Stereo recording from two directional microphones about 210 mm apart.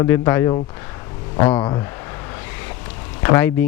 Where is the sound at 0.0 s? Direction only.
15° left (ahead or behind).